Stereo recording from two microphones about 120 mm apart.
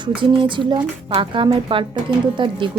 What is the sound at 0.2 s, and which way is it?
A woman's voice, 40° right (ahead or behind).